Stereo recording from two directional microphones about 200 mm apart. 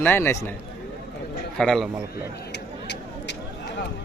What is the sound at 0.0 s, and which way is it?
Speech, 10° left (ahead or behind).